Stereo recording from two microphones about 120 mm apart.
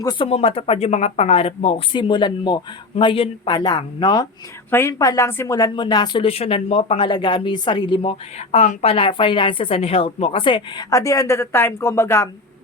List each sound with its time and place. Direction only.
0.0 s speech: 35° left (ahead or behind)
0.3 s speech: 55° left (ahead or behind)
2.0 s speech: 40° left (ahead or behind)
4.7 s a woman's voice: 25° left (ahead or behind)
6.2 s a woman's voice: 55° left (ahead or behind)
8.4 s speech: 80° left
8.8 s a woman's voice: 50° left (ahead or behind)
10.8 s a woman's voice: 25° left (ahead or behind)